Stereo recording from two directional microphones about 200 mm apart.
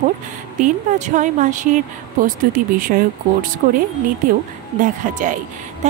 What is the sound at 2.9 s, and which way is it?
A woman's voice, 50° right (ahead or behind).